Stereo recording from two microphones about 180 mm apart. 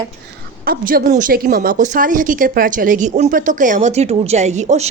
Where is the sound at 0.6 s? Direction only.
50° right (ahead or behind).